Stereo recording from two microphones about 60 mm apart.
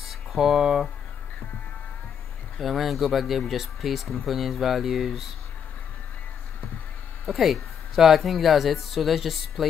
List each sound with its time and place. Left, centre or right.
0.0 s a sound: centre
2.6 s speech: centre
7.2 s speech: centre